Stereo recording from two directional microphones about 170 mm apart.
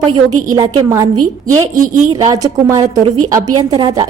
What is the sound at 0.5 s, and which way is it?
A woman's voice, 20° right (ahead or behind).